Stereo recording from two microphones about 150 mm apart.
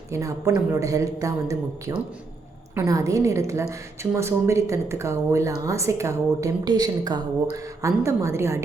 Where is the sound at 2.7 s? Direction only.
20° right (ahead or behind).